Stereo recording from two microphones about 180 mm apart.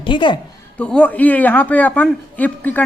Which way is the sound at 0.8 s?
5° left (ahead or behind).